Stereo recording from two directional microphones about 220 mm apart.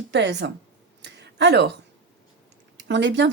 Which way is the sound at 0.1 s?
55° right (ahead or behind).